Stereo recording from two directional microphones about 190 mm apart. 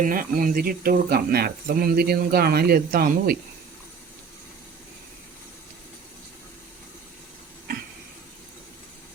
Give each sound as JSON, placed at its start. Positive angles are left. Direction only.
{"t": 0.0, "sound": "speech", "side_deg": -50}